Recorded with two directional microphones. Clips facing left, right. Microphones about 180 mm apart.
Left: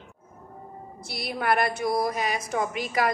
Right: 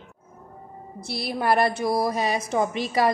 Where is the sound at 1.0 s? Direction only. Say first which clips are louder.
Right 3 dB; 30° right (ahead or behind).